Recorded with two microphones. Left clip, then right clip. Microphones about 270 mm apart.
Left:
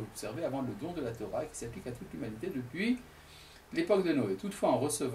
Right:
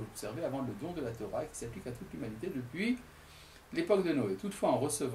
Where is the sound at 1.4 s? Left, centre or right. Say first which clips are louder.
Left 1 dB; centre.